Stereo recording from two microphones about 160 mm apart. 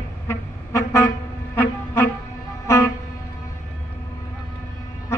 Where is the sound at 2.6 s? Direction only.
20° left (ahead or behind).